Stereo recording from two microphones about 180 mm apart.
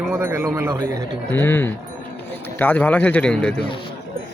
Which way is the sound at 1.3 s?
10° left (ahead or behind).